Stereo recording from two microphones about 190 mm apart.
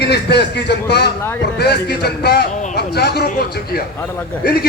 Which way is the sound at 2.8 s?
55° left (ahead or behind).